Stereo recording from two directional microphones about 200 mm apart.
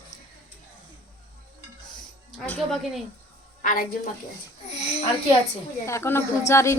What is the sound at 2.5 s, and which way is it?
Speech, centre (ahead or behind).